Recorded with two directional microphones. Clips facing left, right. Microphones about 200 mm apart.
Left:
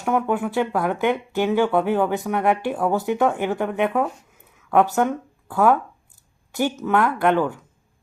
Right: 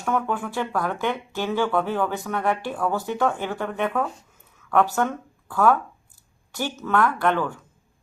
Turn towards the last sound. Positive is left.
turn(degrees=15)  # may be behind; listen again after turning